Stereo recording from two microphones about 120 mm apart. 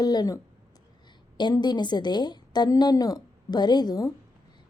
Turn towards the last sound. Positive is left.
turn(degrees=35)  # may be behind; listen again after turning